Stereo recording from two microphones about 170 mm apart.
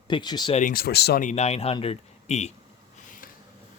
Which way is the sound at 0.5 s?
55° left (ahead or behind).